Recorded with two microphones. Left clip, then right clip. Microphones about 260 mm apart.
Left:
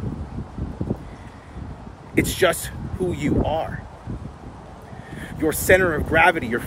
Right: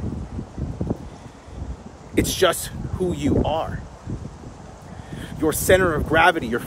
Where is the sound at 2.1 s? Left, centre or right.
Centre.